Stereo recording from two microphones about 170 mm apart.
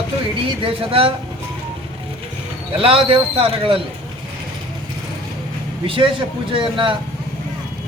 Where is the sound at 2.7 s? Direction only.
35° right (ahead or behind).